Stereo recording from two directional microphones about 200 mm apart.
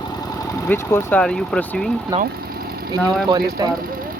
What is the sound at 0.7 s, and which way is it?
Speech, 10° left (ahead or behind).